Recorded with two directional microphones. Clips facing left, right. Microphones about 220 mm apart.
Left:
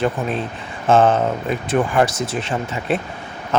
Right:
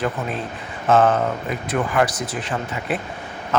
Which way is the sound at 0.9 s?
25° left (ahead or behind).